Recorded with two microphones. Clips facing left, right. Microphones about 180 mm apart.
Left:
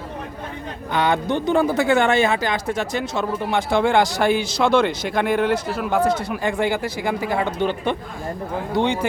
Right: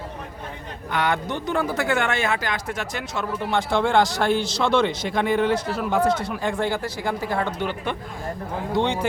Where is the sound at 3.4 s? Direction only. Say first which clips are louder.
Left 2 dB; 15° left (ahead or behind).